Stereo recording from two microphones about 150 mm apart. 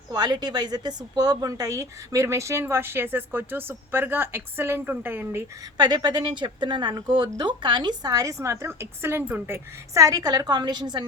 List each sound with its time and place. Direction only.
0.1 s a woman's voice: 25° right (ahead or behind)
5.7 s a woman's voice: 25° right (ahead or behind)